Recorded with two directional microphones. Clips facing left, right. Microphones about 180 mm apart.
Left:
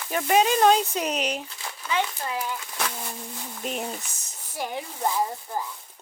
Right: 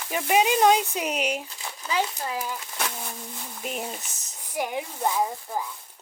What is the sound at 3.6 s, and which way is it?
Speech, 5° right (ahead or behind).